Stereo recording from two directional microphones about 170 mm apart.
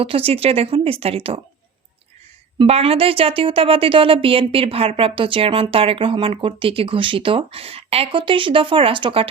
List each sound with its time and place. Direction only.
0.0 s a woman's voice: 35° right (ahead or behind)
2.6 s a woman's voice: 35° right (ahead or behind)